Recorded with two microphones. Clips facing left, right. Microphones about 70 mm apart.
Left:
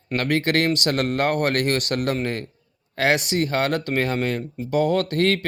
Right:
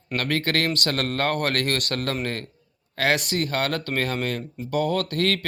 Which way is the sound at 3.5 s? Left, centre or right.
Left.